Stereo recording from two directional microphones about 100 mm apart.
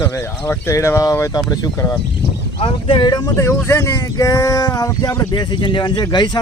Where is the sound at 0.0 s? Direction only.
25° left (ahead or behind).